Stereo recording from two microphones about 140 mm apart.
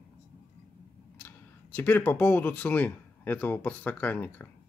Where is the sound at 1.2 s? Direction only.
10° left (ahead or behind).